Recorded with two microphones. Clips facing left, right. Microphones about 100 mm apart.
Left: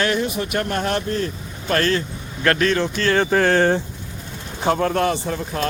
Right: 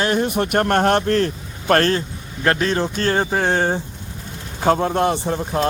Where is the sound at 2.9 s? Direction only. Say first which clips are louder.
Left 1 dB; 35° right (ahead or behind).